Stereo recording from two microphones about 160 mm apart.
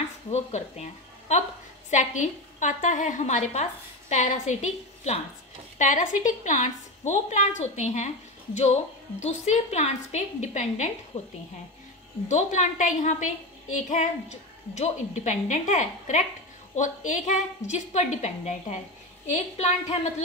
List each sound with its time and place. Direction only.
0.3 s a woman's voice: 45° left (ahead or behind)
1.9 s a woman's voice: 50° left (ahead or behind)